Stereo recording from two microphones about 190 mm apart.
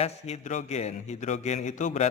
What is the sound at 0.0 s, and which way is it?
A man's voice, 35° left (ahead or behind).